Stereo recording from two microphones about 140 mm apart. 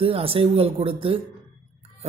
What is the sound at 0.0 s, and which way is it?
Speech, 40° right (ahead or behind).